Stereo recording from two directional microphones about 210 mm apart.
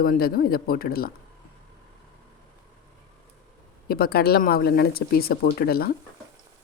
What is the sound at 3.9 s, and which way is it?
A woman's voice, 50° left (ahead or behind).